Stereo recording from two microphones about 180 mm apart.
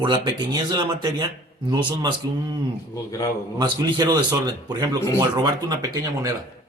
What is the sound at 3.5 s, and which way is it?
Speech, 25° right (ahead or behind).